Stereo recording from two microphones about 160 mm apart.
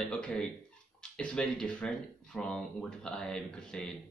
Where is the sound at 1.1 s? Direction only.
5° left (ahead or behind).